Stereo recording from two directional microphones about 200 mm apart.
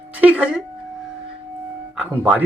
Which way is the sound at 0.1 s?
5° right (ahead or behind).